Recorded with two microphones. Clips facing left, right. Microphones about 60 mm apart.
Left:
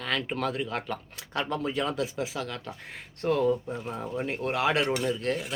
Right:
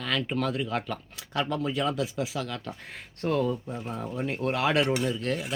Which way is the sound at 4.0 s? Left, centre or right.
Centre.